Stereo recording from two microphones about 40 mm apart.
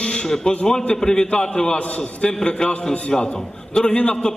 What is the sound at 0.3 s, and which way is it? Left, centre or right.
A man's voice, centre.